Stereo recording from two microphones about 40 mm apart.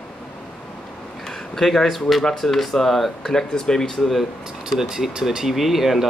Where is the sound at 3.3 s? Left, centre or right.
Centre.